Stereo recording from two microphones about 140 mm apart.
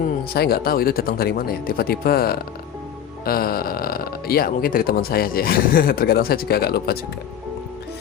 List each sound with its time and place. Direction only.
0.4 s speech: 90° left